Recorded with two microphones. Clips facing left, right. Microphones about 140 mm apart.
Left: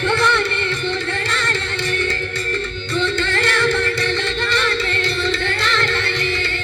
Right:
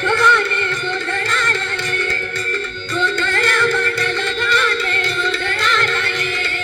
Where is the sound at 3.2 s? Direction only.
45° right (ahead or behind).